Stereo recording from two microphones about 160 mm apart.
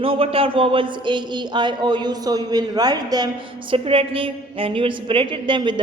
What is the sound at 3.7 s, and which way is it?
A woman's voice, 35° right (ahead or behind).